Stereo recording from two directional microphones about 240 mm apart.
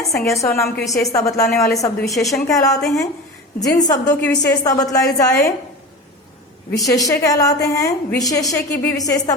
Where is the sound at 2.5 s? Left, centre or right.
Centre.